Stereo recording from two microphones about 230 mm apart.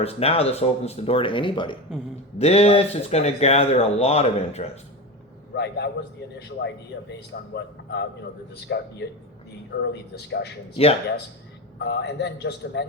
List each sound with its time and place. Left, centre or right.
0.0 s speech: left
5.5 s a man's voice: left
7.1 s a man's voice: left
10.8 s speech: left
11.8 s a man's voice: left